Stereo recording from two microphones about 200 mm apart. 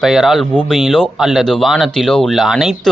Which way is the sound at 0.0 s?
Centre (ahead or behind).